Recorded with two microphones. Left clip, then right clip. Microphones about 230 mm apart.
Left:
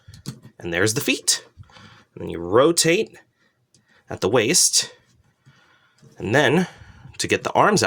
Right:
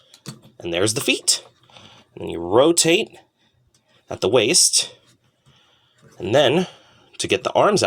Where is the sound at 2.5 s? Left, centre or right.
Left.